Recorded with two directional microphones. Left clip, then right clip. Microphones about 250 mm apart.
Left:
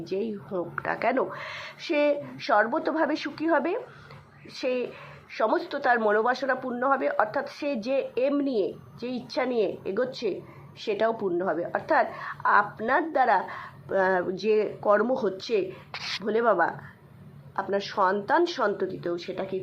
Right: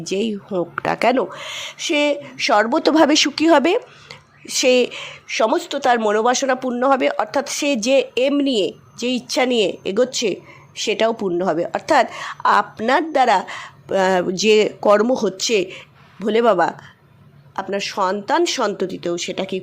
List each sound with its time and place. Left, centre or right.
0.0 s a woman's voice: right